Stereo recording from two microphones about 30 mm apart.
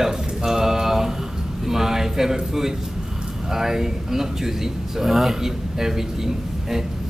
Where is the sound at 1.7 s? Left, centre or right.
Centre.